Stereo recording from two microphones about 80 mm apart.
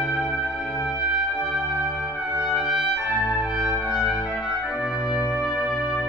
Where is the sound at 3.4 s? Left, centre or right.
Centre.